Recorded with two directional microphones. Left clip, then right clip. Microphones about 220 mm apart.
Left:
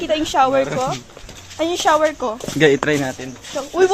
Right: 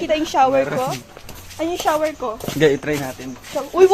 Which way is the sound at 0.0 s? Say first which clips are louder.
Even; 10° left (ahead or behind).